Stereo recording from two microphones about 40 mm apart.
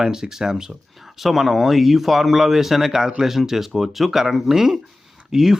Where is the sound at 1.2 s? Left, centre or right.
Centre.